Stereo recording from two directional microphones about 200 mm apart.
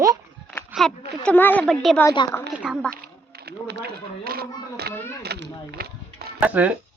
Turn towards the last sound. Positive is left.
turn(degrees=-5)  # may be behind; listen again after turning